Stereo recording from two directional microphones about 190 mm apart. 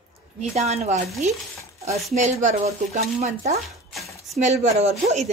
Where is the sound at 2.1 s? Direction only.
40° right (ahead or behind).